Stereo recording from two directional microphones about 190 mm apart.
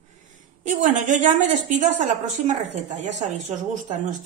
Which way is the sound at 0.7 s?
40° right (ahead or behind).